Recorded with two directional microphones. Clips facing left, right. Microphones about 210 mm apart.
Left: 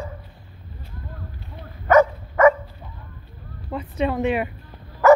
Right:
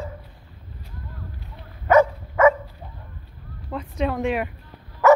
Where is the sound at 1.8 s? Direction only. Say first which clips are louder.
Left 1 dB; 10° right (ahead or behind).